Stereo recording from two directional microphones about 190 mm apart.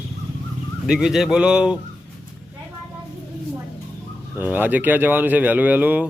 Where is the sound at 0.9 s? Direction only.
Centre (ahead or behind).